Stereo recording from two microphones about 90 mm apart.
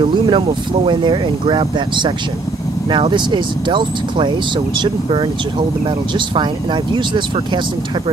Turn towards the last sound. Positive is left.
turn(degrees=-60)  # may be behind; listen again after turning